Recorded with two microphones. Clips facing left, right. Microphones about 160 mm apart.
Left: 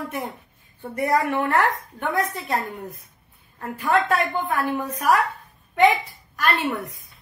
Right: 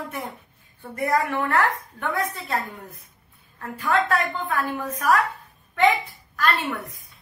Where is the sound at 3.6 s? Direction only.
20° left (ahead or behind).